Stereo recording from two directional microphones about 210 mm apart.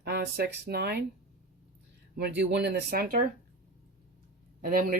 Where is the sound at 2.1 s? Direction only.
50° right (ahead or behind).